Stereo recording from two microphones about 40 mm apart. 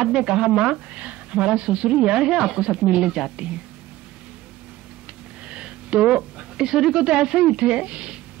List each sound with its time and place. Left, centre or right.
0.0 s a woman's voice: centre
3.1 s speech: centre
5.5 s a woman's voice: right